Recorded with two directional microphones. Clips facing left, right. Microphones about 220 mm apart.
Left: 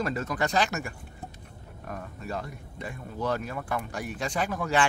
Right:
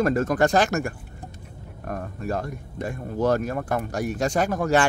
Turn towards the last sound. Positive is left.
turn(degrees=-45)  # may be behind; listen again after turning